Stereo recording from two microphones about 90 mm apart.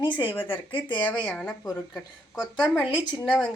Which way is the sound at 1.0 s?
10° left (ahead or behind).